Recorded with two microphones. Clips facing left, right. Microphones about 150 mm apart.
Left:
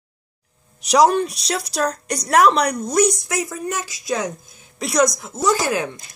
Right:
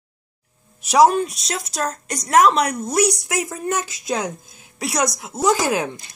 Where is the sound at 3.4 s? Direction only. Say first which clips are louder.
Right 2 dB; 20° right (ahead or behind).